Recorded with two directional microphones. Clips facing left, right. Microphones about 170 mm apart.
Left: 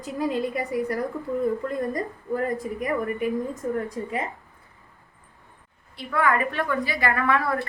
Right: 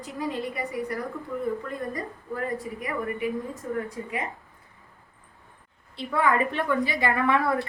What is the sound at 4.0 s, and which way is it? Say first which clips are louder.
Speech: left 4 dB; 40° left (ahead or behind).